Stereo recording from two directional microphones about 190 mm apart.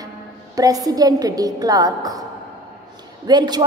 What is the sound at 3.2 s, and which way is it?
Speech, 20° right (ahead or behind).